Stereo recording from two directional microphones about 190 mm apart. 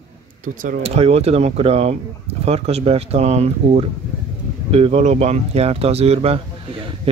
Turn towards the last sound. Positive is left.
turn(degrees=-30)  # may be behind; listen again after turning